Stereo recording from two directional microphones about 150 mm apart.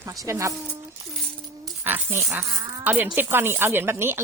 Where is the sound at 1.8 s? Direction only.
10° right (ahead or behind).